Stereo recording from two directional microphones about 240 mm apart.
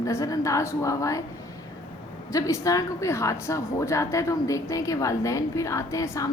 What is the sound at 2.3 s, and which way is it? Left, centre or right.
A woman's voice, centre.